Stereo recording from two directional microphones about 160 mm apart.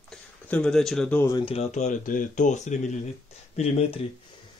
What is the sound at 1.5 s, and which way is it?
Speech, 40° left (ahead or behind).